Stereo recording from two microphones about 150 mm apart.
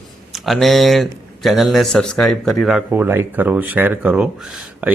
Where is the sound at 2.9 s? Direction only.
15° right (ahead or behind).